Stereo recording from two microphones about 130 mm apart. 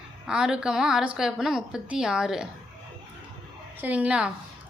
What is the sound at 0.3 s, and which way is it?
A woman's voice, 5° right (ahead or behind).